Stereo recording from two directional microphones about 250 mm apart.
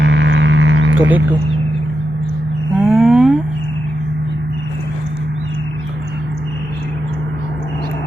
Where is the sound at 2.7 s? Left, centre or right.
Centre.